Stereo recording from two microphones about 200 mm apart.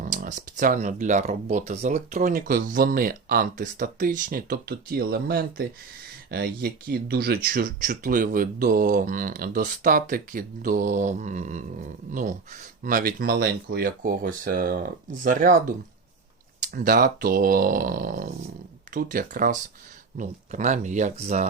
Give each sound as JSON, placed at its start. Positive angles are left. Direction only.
{"t": 0.0, "sound": "speech", "side_deg": -40}
{"t": 12.8, "sound": "speech", "side_deg": -45}